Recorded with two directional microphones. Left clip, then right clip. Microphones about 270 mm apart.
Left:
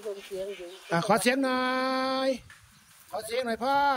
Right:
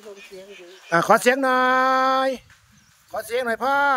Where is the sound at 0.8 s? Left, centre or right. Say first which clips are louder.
Right 8 dB; centre.